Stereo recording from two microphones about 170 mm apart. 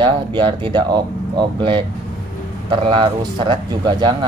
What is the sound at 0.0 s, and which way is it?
Speech, 25° right (ahead or behind).